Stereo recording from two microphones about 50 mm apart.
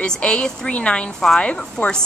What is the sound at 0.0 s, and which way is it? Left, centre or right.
A woman's voice, centre.